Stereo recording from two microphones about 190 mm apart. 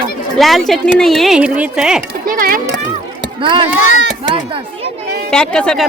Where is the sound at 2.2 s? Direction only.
50° right (ahead or behind).